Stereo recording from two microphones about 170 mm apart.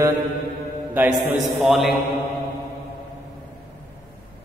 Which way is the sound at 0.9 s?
5° right (ahead or behind).